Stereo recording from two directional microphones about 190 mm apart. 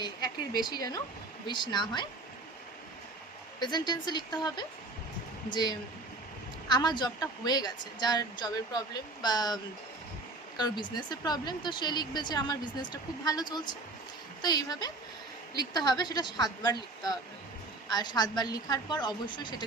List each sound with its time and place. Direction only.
0.0 s a woman's voice: 20° left (ahead or behind)
3.6 s speech: 20° left (ahead or behind)
10.9 s speech: 20° left (ahead or behind)
17.8 s speech: 20° left (ahead or behind)